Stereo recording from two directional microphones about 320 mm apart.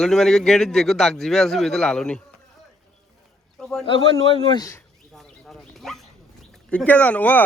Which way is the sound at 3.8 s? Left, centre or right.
Centre.